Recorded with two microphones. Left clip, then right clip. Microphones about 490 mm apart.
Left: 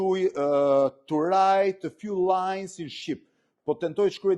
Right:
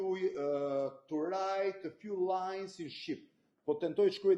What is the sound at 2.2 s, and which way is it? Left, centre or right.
Speech, left.